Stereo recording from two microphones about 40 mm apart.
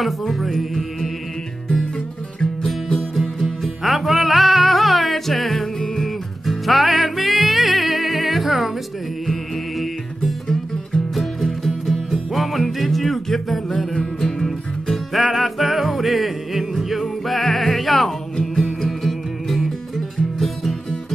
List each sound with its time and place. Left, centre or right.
0.0 s music: centre
3.3 s music: centre
9.2 s music: centre
11.6 s music: centre
15.1 s music: centre
18.5 s music: centre
18.9 s music: centre